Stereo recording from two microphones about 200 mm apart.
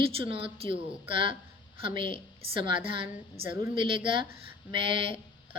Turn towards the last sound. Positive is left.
turn(degrees=-25)  # may be behind; listen again after turning